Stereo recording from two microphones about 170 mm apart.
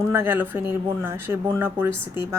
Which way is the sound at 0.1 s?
15° right (ahead or behind).